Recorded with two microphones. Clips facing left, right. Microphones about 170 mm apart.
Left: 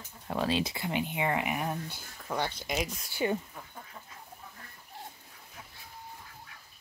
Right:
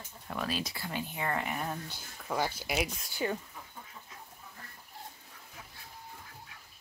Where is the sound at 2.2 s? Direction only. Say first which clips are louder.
Even; 5° right (ahead or behind).